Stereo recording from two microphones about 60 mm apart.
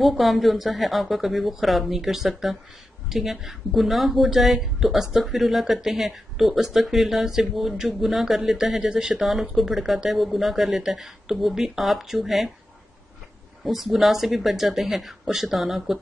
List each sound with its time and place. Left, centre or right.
0.0 s a woman's voice: centre
13.7 s a woman's voice: centre